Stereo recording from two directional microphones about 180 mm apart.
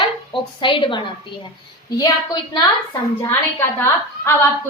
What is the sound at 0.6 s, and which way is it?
A woman's voice, 25° left (ahead or behind).